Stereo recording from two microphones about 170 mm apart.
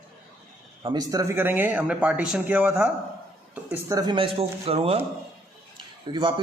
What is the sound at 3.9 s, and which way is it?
A man's voice, 25° right (ahead or behind).